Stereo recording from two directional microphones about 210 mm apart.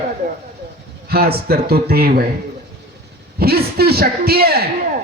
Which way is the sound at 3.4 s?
45° right (ahead or behind).